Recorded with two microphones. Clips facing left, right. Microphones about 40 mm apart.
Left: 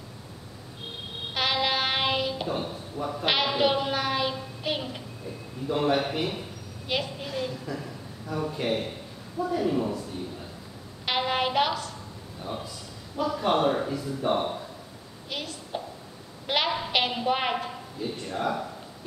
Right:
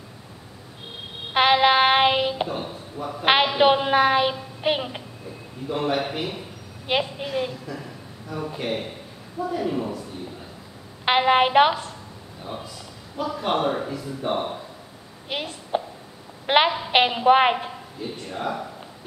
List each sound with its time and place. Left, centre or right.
1.3 s music: right
2.4 s speech: centre
3.5 s child singing: right
5.7 s speech: centre
6.9 s child singing: right
8.3 s speech: centre
9.5 s speech: centre
11.1 s child singing: right
12.4 s a sound: centre
13.2 s speech: centre
15.2 s a sound: right
16.4 s child singing: right
18.1 s speech: centre